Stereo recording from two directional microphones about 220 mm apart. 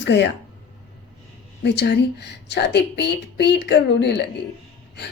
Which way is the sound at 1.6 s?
55° left (ahead or behind).